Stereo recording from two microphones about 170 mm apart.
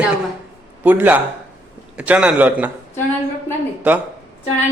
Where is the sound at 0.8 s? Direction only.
10° right (ahead or behind).